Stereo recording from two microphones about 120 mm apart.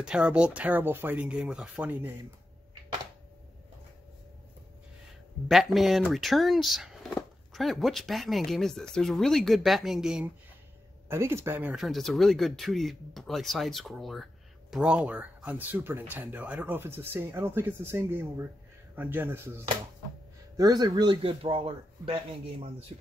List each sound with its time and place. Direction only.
0.0 s speech: 5° right (ahead or behind)
5.5 s speech: centre (ahead or behind)
11.1 s speech: 20° right (ahead or behind)
11.7 s speech: centre (ahead or behind); by 19.6 s 20° right (ahead or behind)
20.5 s speech: 35° right (ahead or behind); by 22.8 s 55° right (ahead or behind)